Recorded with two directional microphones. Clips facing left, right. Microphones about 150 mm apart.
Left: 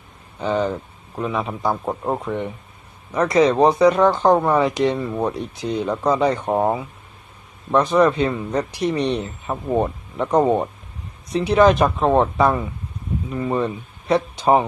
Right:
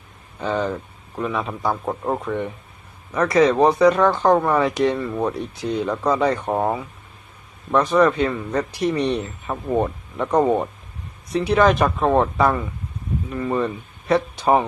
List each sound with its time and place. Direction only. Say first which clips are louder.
0.3 s speech: left 2 dB; 15° left (ahead or behind)
9.5 s speech: left 1 dB; 10° left (ahead or behind)